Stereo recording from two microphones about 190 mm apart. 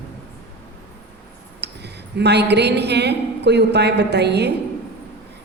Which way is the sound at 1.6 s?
60° right (ahead or behind).